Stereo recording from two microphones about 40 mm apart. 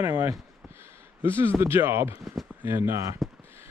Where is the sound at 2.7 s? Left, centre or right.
Right.